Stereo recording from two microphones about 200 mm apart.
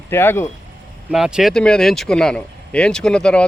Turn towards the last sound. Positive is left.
turn(degrees=5)  # may be behind; listen again after turning